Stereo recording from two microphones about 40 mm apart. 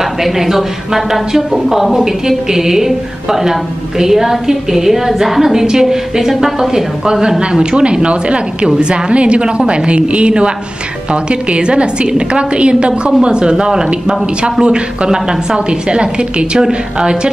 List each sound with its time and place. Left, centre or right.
0.0 s a woman's voice: centre